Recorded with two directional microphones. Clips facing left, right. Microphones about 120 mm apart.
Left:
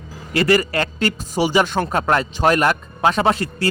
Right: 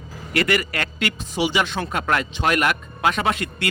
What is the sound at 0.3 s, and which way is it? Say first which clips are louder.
Speech: left 5 dB; 35° left (ahead or behind).